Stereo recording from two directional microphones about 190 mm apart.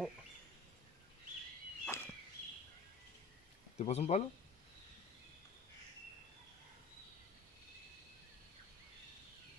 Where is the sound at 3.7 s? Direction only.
35° left (ahead or behind).